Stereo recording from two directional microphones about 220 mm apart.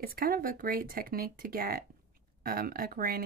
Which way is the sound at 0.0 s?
45° right (ahead or behind).